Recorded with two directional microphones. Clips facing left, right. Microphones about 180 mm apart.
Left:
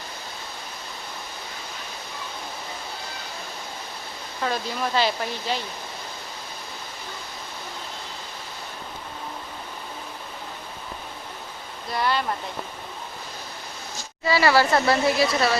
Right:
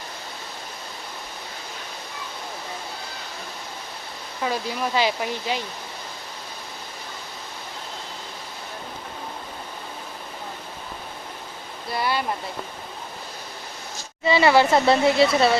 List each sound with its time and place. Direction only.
4.4 s speech: 10° right (ahead or behind)
11.9 s speech: 5° right (ahead or behind)
14.3 s speech: 20° right (ahead or behind)